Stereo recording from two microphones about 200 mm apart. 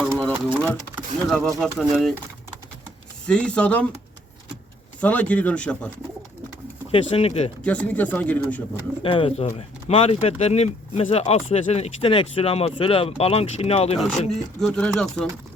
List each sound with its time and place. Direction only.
0.2 s a sound: 5° left (ahead or behind)
0.9 s speech: centre (ahead or behind)
3.2 s speech: 5° left (ahead or behind)
4.9 s speech: 5° left (ahead or behind)
6.9 s speech: 30° left (ahead or behind)
7.6 s speech: 5° left (ahead or behind)
9.0 s speech: 25° left (ahead or behind)
14.3 s speech: 5° left (ahead or behind)